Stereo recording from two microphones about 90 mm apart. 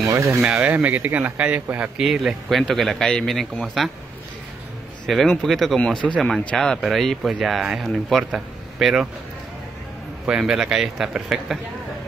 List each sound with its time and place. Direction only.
0.0 s speech: 35° right (ahead or behind)
0.4 s a man's voice: 10° right (ahead or behind)
2.0 s speech: centre (ahead or behind)
5.0 s speech: 5° left (ahead or behind)
10.2 s speech: 5° right (ahead or behind)